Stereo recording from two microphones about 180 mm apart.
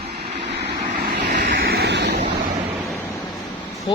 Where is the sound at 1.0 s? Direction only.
60° right (ahead or behind).